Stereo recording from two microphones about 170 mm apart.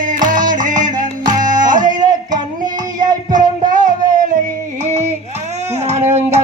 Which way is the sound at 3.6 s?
50° right (ahead or behind).